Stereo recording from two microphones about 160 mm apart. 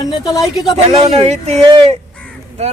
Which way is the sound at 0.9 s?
40° right (ahead or behind).